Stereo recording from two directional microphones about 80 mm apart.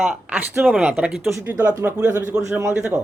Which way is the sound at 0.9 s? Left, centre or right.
Centre.